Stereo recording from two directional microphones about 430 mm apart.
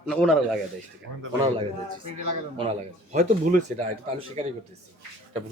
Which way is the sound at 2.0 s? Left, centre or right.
Right.